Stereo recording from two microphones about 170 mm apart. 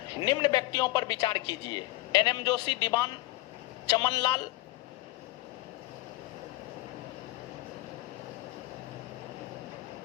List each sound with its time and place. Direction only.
0.2 s a man's voice: 25° left (ahead or behind)